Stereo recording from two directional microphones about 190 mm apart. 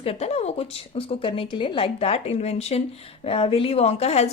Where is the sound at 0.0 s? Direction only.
30° left (ahead or behind).